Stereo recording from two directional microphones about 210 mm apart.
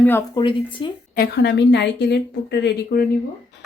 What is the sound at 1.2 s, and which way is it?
Speech, 55° left (ahead or behind).